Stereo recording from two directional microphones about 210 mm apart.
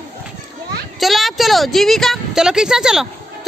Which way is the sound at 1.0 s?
Centre (ahead or behind).